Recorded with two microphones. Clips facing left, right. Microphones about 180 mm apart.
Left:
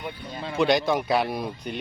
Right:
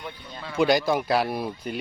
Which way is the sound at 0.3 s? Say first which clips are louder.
Left 4 dB; 25° left (ahead or behind).